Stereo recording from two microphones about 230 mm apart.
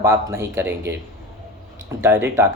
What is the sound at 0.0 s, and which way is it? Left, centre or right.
Speech, centre.